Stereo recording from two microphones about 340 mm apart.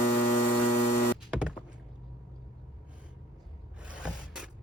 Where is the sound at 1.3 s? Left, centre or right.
Centre.